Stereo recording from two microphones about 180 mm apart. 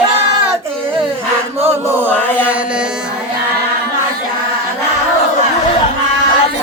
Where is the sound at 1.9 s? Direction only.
10° right (ahead or behind).